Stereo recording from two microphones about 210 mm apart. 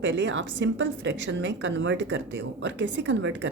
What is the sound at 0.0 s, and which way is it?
A woman's voice, 60° right (ahead or behind).